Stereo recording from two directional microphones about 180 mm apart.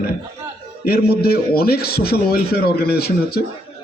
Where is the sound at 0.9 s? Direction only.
60° left (ahead or behind).